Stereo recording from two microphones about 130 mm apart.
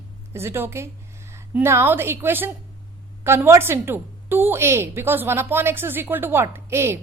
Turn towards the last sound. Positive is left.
turn(degrees=-20)  # may be behind; listen again after turning